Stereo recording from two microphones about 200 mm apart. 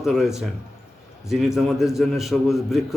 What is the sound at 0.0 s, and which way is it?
A man's voice, centre (ahead or behind).